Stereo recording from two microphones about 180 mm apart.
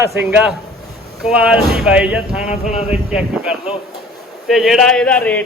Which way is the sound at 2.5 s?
40° left (ahead or behind).